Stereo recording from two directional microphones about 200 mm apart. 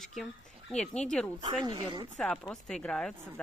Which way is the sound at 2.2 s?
5° left (ahead or behind).